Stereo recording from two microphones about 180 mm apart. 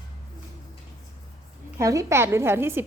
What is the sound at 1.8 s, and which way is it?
A woman's voice, 15° right (ahead or behind).